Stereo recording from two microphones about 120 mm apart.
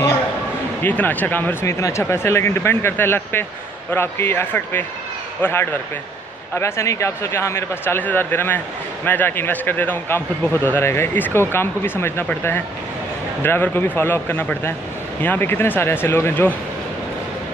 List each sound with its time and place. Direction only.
0.8 s speech: 15° left (ahead or behind)